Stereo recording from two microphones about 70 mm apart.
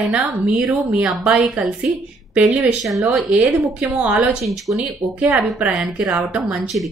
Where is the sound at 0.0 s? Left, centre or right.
Centre.